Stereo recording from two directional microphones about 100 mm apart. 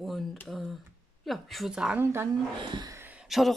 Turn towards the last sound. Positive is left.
turn(degrees=0)  # may be behind; listen again after turning